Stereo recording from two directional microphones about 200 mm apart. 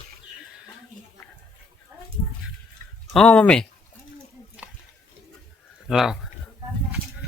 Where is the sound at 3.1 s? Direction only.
5° left (ahead or behind).